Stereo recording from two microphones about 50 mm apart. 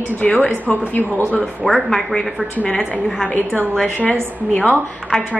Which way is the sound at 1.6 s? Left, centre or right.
Centre.